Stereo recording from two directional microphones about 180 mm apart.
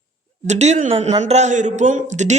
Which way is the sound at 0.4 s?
40° right (ahead or behind).